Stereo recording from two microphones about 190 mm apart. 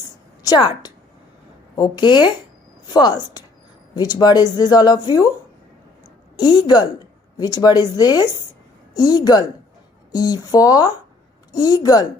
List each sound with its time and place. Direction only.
0.4 s a woman's voice: 20° left (ahead or behind)
6.3 s a woman's voice: 25° left (ahead or behind)